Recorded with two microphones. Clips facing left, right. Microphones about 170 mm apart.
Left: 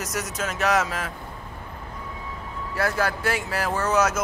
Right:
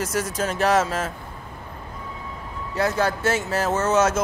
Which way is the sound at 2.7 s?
20° right (ahead or behind).